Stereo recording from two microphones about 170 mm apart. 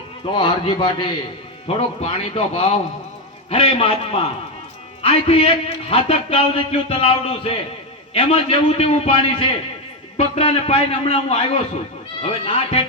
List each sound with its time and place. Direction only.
0.3 s a man's voice: 30° left (ahead or behind)